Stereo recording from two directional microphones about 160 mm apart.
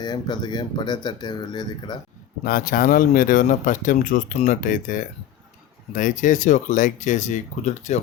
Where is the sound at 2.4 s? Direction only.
60° left (ahead or behind).